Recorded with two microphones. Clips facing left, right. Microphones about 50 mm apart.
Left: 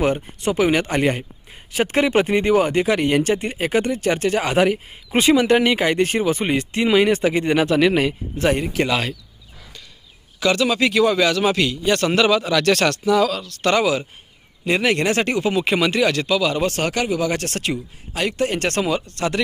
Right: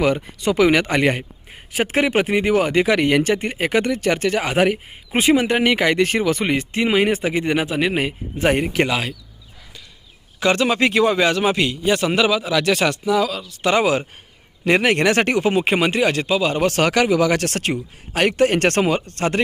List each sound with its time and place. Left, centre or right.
0.5 s speech: right
2.0 s a man's voice: right
2.5 s a man's voice: right
5.6 s speech: right
6.6 s a man's voice: right
7.6 s a man's voice: centre
8.4 s speech: right
8.9 s speech: centre
10.4 s a man's voice: right
11.9 s speech: centre
14.7 s a man's voice: right; by 16.5 s centre
16.7 s speech: right
17.5 s speech: right
18.8 s a man's voice: right